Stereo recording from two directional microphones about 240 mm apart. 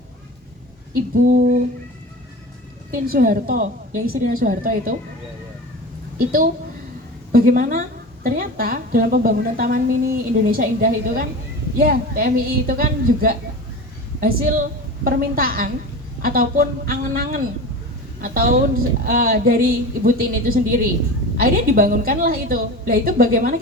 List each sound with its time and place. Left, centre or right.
1.1 s a woman's voice: right
2.9 s a woman's voice: right
6.1 s a woman's voice: right